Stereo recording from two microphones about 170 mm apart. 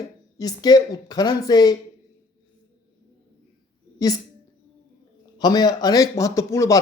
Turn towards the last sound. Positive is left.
turn(degrees=20)  # may be behind; listen again after turning